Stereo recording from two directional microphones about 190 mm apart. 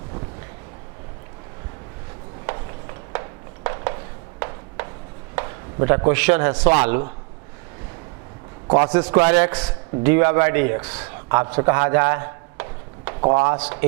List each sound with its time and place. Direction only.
2.5 s a sound: 20° right (ahead or behind)
5.3 s chopping: 15° right (ahead or behind)
6.8 s a man's voice: 15° right (ahead or behind)
8.6 s a man's voice: 25° right (ahead or behind)
9.3 s a man's voice: 10° right (ahead or behind)
13.6 s a man's voice: 10° right (ahead or behind)